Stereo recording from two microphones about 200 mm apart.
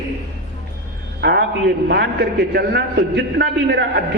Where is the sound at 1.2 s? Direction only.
55° right (ahead or behind).